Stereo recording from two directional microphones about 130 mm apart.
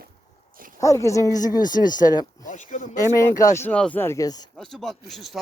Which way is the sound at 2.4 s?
80° left.